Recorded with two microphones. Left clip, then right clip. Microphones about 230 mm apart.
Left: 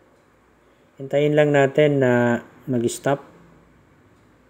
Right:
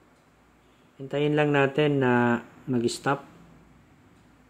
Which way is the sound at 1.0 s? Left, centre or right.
Centre.